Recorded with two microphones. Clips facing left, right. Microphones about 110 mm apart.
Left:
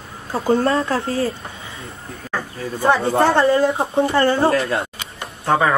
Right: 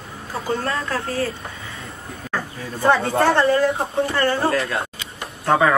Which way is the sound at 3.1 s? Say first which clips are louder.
Left 2 dB; 25° left (ahead or behind).